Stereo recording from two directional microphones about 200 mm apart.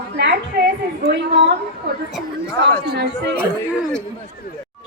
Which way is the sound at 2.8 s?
55° right (ahead or behind).